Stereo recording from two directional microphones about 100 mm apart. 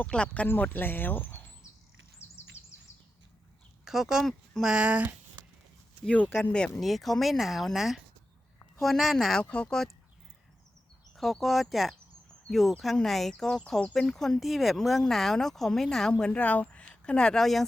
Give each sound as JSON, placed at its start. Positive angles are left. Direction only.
{"t": 0.0, "sound": "speech", "side_deg": 10}
{"t": 3.8, "sound": "speech", "side_deg": -5}
{"t": 4.7, "sound": "speech", "side_deg": -10}
{"t": 6.1, "sound": "speech", "side_deg": 15}
{"t": 11.2, "sound": "speech", "side_deg": 0}